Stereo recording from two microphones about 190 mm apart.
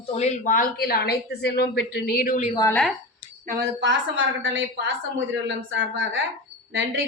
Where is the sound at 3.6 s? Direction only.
65° right (ahead or behind); by 4.6 s 85° right.